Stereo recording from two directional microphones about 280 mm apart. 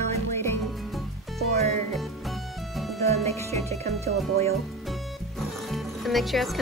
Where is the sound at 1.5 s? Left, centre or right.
Right.